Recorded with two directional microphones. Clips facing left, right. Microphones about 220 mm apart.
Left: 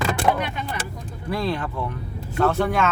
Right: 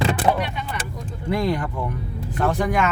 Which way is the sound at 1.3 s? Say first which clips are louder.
Right 3 dB; 15° right (ahead or behind).